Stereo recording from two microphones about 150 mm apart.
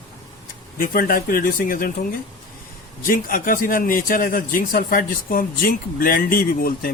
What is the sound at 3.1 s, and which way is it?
A man's voice, 70° left (ahead or behind).